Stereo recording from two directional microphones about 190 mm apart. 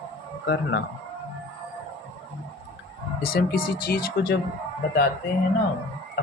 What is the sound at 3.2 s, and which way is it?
Speech, 55° left (ahead or behind).